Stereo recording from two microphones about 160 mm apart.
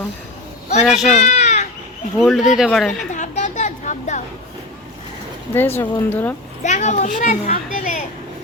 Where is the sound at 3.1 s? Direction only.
45° left (ahead or behind).